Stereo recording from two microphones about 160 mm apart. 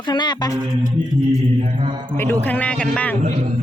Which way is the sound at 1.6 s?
40° right (ahead or behind).